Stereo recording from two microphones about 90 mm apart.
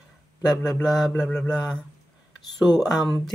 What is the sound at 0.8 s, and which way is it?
Mantra, 5° left (ahead or behind).